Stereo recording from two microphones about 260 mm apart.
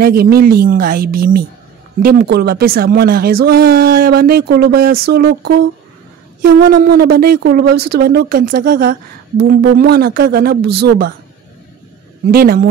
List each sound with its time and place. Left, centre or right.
0.0 s speech: right
12.3 s speech: right